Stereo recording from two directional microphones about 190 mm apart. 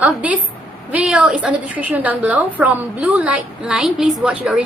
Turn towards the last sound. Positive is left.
turn(degrees=-5)  # may be behind; listen again after turning